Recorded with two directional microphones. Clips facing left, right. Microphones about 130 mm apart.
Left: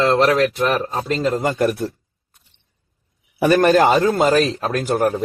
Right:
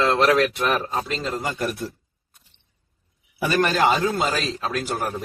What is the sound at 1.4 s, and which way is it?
Speech, 50° left (ahead or behind).